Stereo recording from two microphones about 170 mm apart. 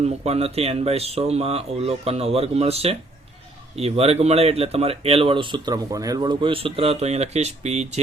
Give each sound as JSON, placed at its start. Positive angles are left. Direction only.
{"t": 0.0, "sound": "speech", "side_deg": -40}